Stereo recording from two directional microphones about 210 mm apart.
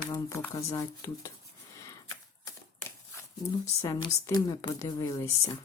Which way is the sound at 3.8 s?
15° left (ahead or behind).